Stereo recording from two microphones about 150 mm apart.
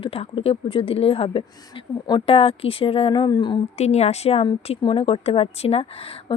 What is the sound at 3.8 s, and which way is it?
Speech, 45° left (ahead or behind).